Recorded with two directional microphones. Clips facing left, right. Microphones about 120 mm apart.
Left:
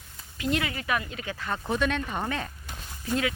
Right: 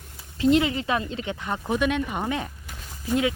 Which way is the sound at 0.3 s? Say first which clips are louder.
Right 9 dB; 25° right (ahead or behind).